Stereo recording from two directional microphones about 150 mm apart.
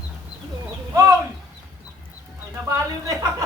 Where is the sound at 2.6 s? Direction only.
20° right (ahead or behind).